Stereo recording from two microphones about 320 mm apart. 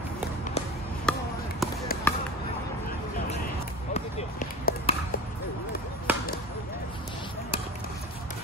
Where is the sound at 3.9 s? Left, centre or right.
Left.